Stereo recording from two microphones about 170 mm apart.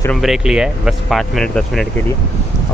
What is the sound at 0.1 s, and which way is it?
Speech, centre (ahead or behind).